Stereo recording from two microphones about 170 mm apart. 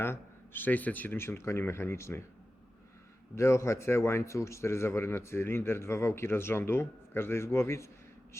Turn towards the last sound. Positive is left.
turn(degrees=15)  # may be behind; listen again after turning